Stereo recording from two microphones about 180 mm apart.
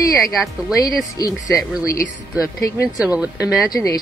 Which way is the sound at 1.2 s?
20° left (ahead or behind).